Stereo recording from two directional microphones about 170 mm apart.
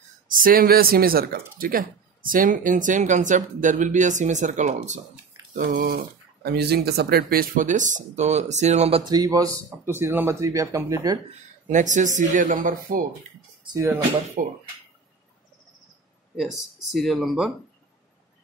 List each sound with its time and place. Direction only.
0.3 s speech: 55° right (ahead or behind)
5.6 s speech: 55° right (ahead or behind)
6.4 s speech: 75° right (ahead or behind); by 9.0 s 40° right (ahead or behind)
9.0 s speech: 20° right (ahead or behind)
11.2 s speech: 45° right (ahead or behind)
13.7 s speech: 20° right (ahead or behind)
14.4 s speech: 55° right (ahead or behind)
16.3 s speech: centre (ahead or behind)